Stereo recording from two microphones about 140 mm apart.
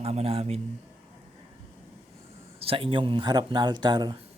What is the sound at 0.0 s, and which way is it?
Speech, 45° right (ahead or behind).